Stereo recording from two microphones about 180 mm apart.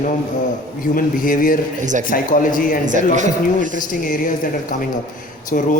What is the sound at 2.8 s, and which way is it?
Speech, 45° right (ahead or behind).